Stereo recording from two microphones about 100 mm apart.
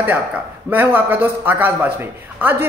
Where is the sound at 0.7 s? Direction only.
20° right (ahead or behind).